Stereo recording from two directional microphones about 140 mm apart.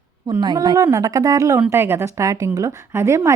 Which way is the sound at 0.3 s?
30° right (ahead or behind).